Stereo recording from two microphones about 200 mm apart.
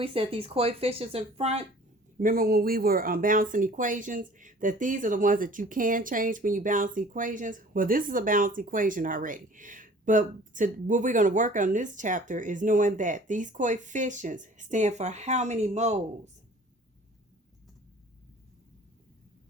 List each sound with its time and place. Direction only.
0.0 s speech: 25° right (ahead or behind)
2.1 s speech: 45° right (ahead or behind)